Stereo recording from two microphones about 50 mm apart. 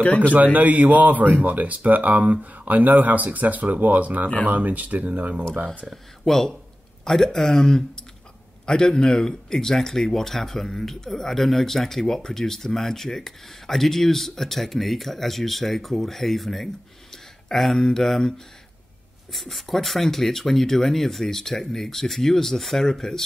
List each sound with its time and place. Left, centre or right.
0.0 s a man's voice: left
0.3 s a man's voice: right
6.2 s speech: centre
19.3 s speech: centre